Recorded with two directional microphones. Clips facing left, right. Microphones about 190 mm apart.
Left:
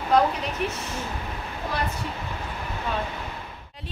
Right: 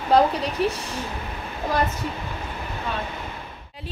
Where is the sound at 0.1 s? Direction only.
30° right (ahead or behind).